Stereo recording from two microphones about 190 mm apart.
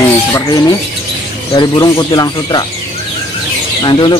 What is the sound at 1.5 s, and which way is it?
Speech, 20° left (ahead or behind).